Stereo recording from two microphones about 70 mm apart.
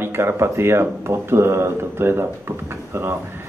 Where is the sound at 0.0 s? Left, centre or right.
Right.